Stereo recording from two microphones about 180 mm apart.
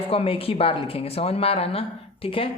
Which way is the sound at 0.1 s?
30° left (ahead or behind).